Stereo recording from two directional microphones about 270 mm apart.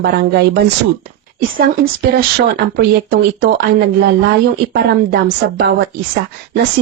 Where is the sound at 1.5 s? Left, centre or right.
Right.